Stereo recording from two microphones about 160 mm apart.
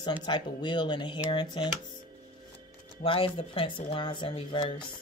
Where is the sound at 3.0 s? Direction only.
35° left (ahead or behind).